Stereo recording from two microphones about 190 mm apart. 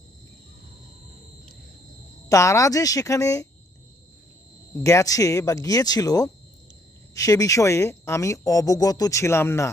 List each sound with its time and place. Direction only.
2.3 s speech: 15° left (ahead or behind)
4.8 s speech: 15° left (ahead or behind)